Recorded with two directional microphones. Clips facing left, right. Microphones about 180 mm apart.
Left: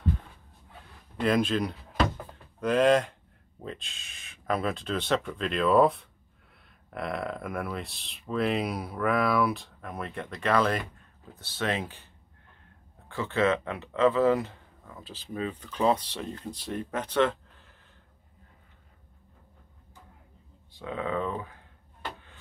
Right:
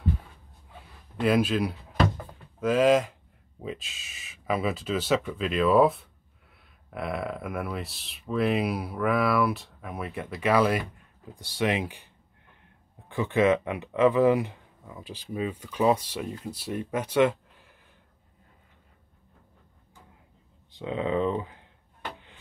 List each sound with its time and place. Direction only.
1.2 s speech: 5° right (ahead or behind)
13.1 s speech: 15° right (ahead or behind)
20.7 s speech: 20° right (ahead or behind)